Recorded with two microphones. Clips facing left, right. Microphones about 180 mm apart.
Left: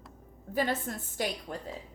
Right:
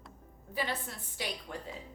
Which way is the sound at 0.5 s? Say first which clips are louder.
Left 6 dB; 45° left (ahead or behind).